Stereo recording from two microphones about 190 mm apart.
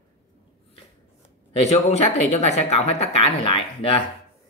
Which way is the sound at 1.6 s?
35° left (ahead or behind).